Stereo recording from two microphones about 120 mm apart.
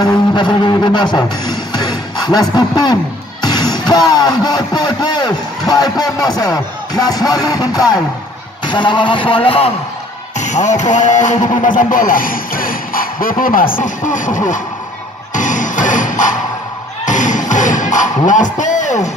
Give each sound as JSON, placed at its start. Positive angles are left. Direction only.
{"t": 0.0, "sound": "music", "side_deg": 40}
{"t": 8.6, "sound": "speech", "side_deg": 40}
{"t": 10.3, "sound": "speech", "side_deg": 80}
{"t": 13.8, "sound": "speech", "side_deg": 90}
{"t": 15.3, "sound": "music", "side_deg": 90}